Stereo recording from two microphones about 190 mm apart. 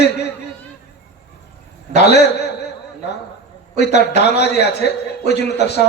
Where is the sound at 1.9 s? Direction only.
60° left (ahead or behind).